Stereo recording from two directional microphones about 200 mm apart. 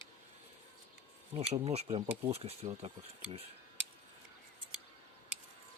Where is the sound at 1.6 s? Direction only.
30° right (ahead or behind).